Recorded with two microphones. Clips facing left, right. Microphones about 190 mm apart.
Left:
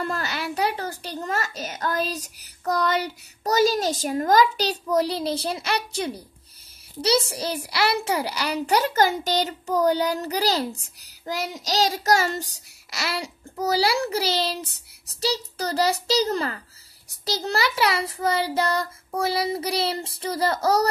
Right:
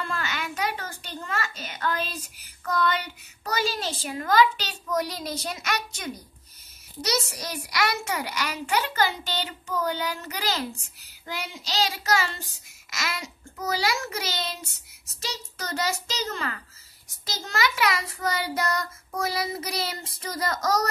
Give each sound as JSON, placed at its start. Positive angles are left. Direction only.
{"t": 0.0, "sound": "a child's voice", "side_deg": 40}